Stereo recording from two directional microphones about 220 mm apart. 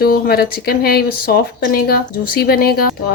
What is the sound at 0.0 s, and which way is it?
Speech, 45° left (ahead or behind).